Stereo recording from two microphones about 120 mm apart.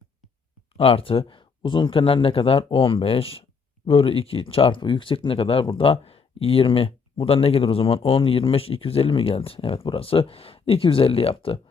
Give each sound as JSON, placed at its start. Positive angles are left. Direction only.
{"t": 0.8, "sound": "speech", "side_deg": 50}